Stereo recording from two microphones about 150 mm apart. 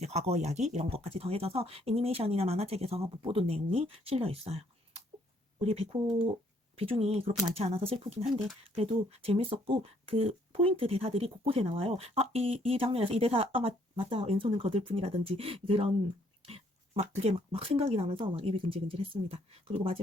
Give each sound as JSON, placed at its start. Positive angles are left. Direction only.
{"t": 0.0, "sound": "speech", "side_deg": -45}